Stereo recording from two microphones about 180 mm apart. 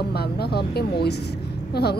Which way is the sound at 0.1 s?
60° left (ahead or behind).